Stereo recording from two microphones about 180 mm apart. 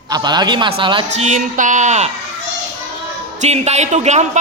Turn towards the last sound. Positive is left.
turn(degrees=-40)  # may be behind; listen again after turning